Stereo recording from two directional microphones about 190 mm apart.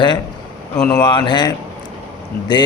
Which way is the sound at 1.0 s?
25° left (ahead or behind).